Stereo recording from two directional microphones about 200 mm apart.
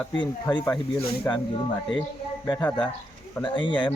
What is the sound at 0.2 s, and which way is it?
A man's voice, 20° left (ahead or behind).